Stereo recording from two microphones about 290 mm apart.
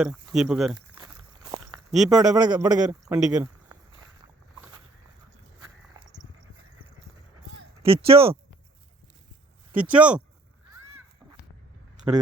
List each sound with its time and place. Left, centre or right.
0.0 s speech: centre
0.9 s walk: centre
1.9 s speech: centre
2.2 s a man's voice: centre
2.8 s speech: centre
7.8 s speech: centre
9.9 s speech: centre